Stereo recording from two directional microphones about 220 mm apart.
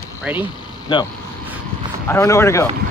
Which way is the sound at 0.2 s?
10° right (ahead or behind).